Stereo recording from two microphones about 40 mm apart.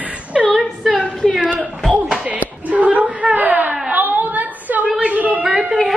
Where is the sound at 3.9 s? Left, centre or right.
Right.